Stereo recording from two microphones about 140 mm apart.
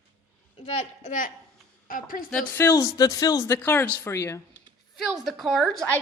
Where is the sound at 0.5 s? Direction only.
45° left (ahead or behind); by 1.3 s 65° left (ahead or behind).